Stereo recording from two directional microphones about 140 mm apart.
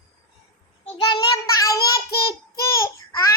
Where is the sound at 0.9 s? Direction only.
35° left (ahead or behind).